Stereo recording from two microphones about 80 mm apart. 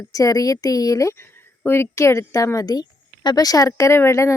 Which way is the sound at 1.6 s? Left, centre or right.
Left.